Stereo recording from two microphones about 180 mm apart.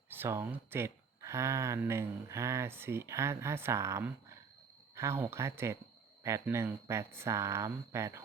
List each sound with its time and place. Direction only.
0.1 s speech: 15° right (ahead or behind)